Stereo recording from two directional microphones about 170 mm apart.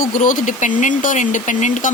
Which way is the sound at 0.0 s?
50° left (ahead or behind).